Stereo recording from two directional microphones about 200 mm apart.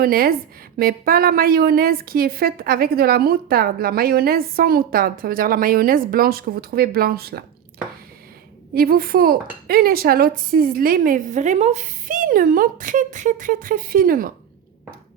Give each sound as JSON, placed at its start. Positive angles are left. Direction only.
{"t": 0.0, "sound": "a woman's voice", "side_deg": -45}
{"t": 8.7, "sound": "a woman's voice", "side_deg": -50}